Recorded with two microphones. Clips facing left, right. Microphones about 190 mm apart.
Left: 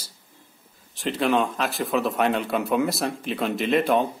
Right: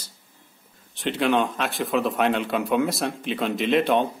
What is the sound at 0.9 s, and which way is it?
Speech, centre (ahead or behind).